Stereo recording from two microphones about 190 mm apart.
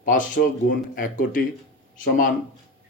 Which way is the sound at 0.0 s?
45° left (ahead or behind).